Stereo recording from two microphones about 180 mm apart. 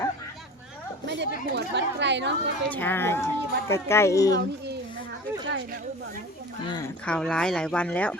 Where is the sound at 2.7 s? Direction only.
10° left (ahead or behind).